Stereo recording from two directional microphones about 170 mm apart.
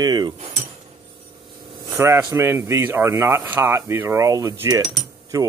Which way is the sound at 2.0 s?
15° right (ahead or behind).